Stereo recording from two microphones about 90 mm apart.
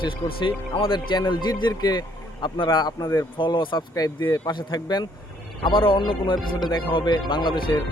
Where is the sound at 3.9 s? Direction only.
45° left (ahead or behind).